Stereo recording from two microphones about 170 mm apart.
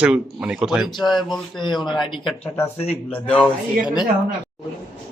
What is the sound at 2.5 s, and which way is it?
Speech, 15° left (ahead or behind).